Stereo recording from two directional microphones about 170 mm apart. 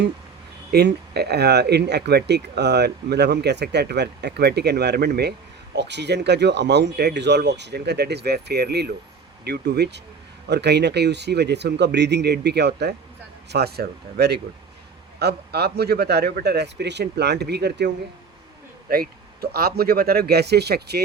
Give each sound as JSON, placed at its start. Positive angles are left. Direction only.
{"t": 0.7, "sound": "speech", "side_deg": -75}
{"t": 5.7, "sound": "speech", "side_deg": -85}
{"t": 18.9, "sound": "speech", "side_deg": -65}